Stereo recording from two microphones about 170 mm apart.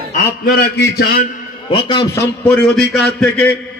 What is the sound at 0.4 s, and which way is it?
Speech, 65° left (ahead or behind).